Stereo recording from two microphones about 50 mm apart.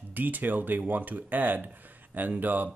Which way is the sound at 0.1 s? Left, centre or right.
Right.